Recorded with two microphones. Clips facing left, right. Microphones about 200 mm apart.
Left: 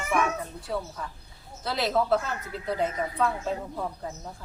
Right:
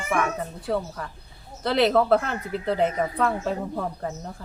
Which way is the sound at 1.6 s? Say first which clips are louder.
Right 6 dB; 60° right (ahead or behind).